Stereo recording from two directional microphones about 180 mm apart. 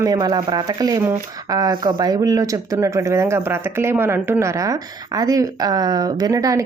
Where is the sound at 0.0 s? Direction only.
20° right (ahead or behind).